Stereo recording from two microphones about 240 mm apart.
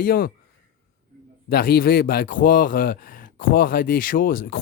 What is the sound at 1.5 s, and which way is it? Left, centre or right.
Speech, left.